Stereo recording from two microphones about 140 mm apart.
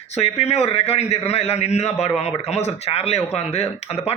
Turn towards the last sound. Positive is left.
turn(degrees=45)  # may be behind; listen again after turning